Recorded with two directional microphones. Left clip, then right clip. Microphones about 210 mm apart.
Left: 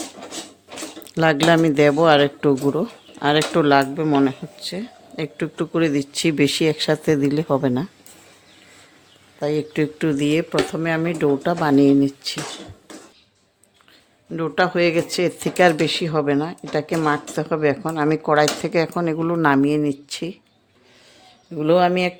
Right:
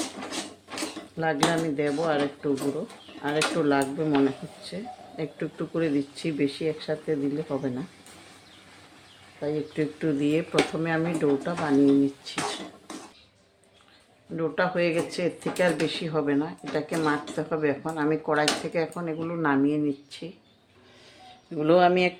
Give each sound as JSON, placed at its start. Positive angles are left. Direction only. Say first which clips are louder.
{"t": 1.1, "sound": "speech", "louder": "left 9 dB", "side_deg": 60}
{"t": 9.4, "sound": "speech", "louder": "left 7 dB", "side_deg": 45}
{"t": 14.3, "sound": "speech", "louder": "left 6 dB", "side_deg": 60}
{"t": 21.5, "sound": "speech", "louder": "left 3 dB", "side_deg": 20}